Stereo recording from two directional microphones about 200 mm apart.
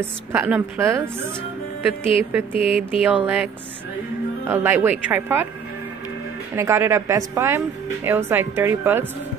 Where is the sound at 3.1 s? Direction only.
5° right (ahead or behind).